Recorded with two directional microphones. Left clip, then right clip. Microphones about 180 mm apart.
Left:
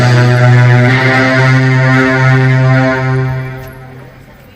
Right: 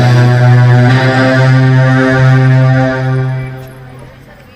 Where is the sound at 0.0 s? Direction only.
30° right (ahead or behind).